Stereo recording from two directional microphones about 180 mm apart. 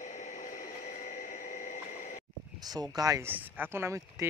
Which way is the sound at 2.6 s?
20° right (ahead or behind).